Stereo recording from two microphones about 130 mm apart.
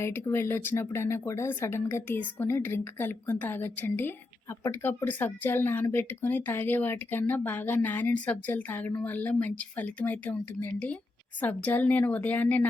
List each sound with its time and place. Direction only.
0.0 s speech: 20° left (ahead or behind)